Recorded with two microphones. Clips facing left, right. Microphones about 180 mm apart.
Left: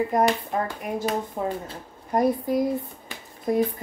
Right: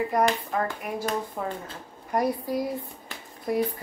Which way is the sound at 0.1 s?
25° left (ahead or behind).